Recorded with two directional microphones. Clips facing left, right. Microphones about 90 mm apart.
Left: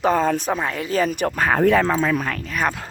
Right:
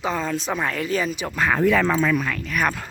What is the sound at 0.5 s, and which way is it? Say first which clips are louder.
Speech: left 1 dB; 25° left (ahead or behind).